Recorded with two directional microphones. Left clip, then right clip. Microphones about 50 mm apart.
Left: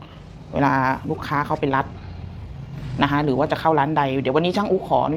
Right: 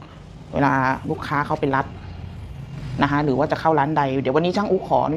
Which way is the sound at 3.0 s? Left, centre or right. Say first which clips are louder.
Even; right.